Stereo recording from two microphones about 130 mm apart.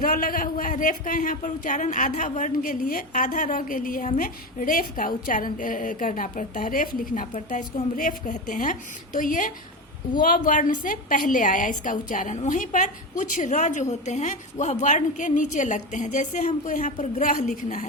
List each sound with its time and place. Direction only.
0.0 s a woman's voice: 90° left; by 16.2 s 70° left (ahead or behind)
16.6 s speech: 85° left